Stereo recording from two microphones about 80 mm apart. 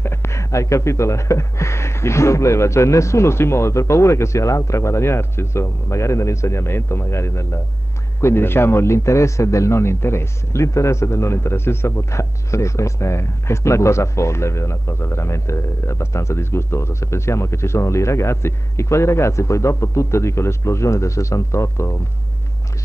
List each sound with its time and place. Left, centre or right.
0.0 s speech: left